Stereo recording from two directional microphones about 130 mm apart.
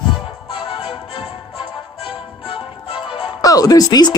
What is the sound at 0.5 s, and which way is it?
Music, 45° left (ahead or behind).